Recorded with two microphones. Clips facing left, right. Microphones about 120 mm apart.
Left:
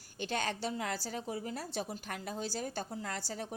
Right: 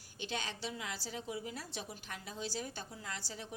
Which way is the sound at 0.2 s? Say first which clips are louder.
Left 6 dB; 50° left (ahead or behind).